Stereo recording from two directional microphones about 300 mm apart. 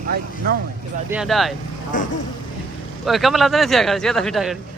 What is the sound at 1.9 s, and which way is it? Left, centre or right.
Speech, left.